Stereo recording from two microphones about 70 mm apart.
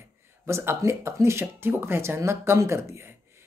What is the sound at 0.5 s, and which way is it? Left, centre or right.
Speech, right.